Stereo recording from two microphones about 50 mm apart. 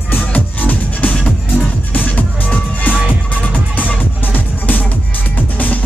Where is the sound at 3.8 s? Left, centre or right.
Left.